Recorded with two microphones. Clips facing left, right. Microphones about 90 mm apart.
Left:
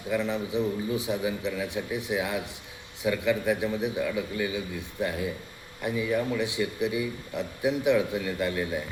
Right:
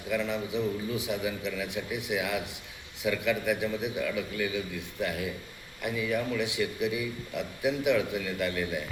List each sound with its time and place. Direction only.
0.3 s a man's voice: 30° left (ahead or behind)